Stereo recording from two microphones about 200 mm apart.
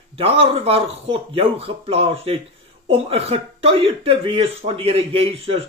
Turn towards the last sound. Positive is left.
turn(degrees=-30)  # may be behind; listen again after turning